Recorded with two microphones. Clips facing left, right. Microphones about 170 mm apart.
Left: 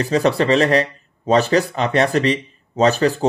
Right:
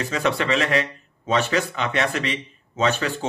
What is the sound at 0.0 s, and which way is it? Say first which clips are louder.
A man's voice: left 7 dB; 35° left (ahead or behind).